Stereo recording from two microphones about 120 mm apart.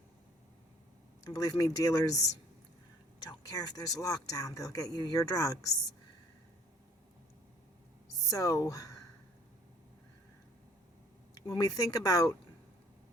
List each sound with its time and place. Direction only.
1.3 s speech: 30° left (ahead or behind)
8.1 s speech: 30° left (ahead or behind)
11.3 s speech: 35° left (ahead or behind)